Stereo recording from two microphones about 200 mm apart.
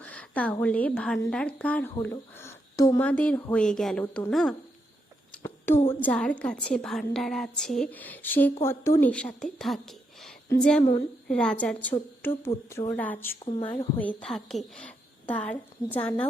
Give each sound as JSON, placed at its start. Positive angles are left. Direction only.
{"t": 0.0, "sound": "a sound", "side_deg": 5}
{"t": 0.6, "sound": "a woman's voice", "side_deg": 5}
{"t": 5.4, "sound": "a sound", "side_deg": 10}
{"t": 6.0, "sound": "a woman's voice", "side_deg": 5}
{"t": 13.4, "sound": "speech", "side_deg": 25}
{"t": 13.9, "sound": "a woman's voice", "side_deg": 10}